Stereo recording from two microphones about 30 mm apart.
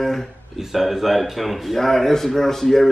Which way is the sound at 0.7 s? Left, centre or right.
Centre.